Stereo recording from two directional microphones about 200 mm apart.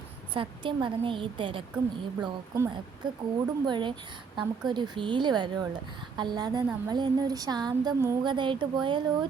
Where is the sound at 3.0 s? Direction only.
20° right (ahead or behind).